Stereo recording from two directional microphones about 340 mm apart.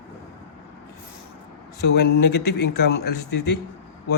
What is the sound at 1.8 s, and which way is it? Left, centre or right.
A man's voice, left.